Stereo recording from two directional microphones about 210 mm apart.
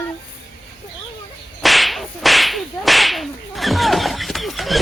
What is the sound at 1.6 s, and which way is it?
Whip, centre (ahead or behind).